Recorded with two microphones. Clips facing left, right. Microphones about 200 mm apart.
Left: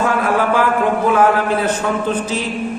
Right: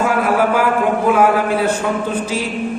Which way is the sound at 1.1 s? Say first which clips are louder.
Even; 10° right (ahead or behind).